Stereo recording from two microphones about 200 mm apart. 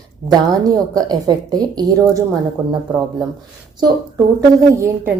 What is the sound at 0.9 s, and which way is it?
A woman's voice, 20° right (ahead or behind).